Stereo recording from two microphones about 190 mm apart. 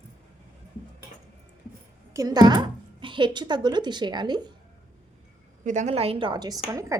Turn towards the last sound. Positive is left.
turn(degrees=-15)  # may be behind; listen again after turning